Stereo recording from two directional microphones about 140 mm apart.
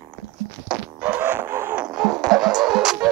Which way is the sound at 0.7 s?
10° right (ahead or behind).